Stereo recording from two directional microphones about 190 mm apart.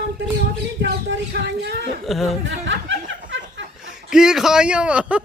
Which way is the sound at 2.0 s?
Centre (ahead or behind).